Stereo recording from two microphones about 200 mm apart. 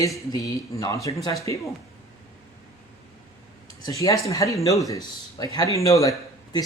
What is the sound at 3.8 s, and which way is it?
Speech, 15° left (ahead or behind).